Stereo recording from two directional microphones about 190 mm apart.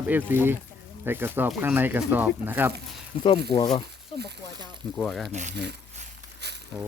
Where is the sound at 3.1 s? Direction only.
35° left (ahead or behind).